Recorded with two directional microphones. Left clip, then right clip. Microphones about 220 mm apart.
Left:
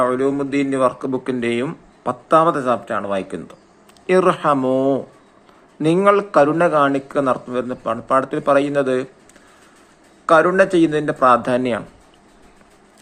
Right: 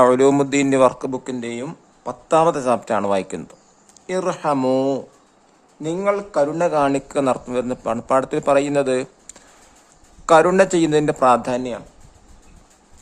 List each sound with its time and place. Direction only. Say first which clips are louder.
0.0 s speech: right 4 dB; 30° right (ahead or behind)
4.0 s a man's voice: left 6 dB; centre (ahead or behind)
4.7 s speech: left 2 dB; 35° right (ahead or behind)
5.8 s a man's voice: left 6 dB; centre (ahead or behind); by 9.0 s 15° right (ahead or behind)
10.2 s speech: even; 20° right (ahead or behind)